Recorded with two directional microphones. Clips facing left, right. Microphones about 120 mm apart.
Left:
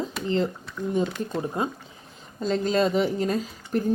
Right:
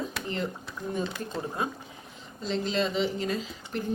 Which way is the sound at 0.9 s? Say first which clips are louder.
Left 6 dB; 20° left (ahead or behind).